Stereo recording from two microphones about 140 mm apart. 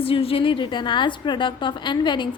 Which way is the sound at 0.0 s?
40° left (ahead or behind).